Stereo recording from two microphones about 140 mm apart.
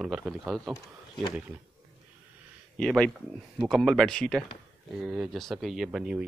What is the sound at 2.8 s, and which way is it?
Speech, 5° left (ahead or behind).